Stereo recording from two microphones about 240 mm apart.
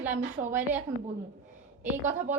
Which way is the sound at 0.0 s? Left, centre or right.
Centre.